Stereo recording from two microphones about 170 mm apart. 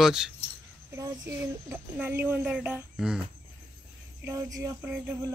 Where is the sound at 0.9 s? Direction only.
15° right (ahead or behind).